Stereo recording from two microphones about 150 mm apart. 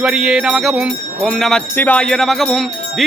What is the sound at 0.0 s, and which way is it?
Music, 5° right (ahead or behind).